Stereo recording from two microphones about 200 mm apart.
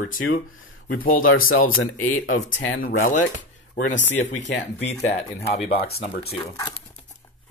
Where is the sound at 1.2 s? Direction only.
90° left.